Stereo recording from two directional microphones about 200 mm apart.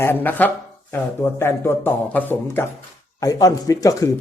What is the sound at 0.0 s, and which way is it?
Speech, 10° left (ahead or behind).